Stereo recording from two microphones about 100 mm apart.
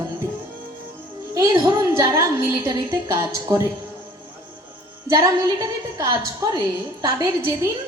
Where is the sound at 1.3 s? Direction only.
35° right (ahead or behind).